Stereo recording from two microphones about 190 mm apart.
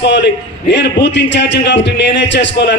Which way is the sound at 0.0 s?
65° left (ahead or behind).